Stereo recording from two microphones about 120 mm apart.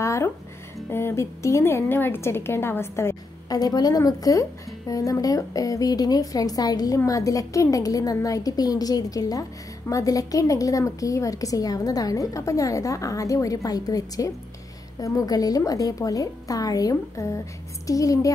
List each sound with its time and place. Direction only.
0.0 s music: 25° left (ahead or behind)
0.8 s a woman's voice: 20° left (ahead or behind)
3.4 s a woman's voice: 30° left (ahead or behind)